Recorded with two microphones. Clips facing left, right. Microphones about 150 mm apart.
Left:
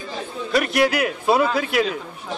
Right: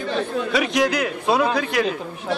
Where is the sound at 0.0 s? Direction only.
65° right (ahead or behind).